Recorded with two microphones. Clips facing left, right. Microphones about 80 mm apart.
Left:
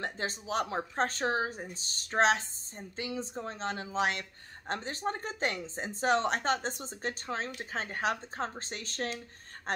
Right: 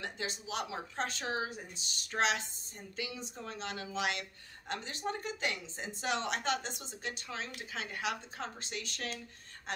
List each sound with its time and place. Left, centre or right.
0.0 s speech: left